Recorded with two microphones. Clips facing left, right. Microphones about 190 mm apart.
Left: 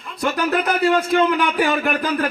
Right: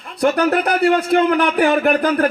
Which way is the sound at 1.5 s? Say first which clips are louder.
Right 5 dB; 55° right (ahead or behind).